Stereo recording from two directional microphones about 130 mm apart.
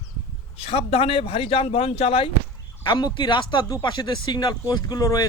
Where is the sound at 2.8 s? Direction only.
35° left (ahead or behind).